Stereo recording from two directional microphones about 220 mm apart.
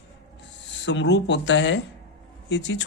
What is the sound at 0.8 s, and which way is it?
Speech, 50° left (ahead or behind).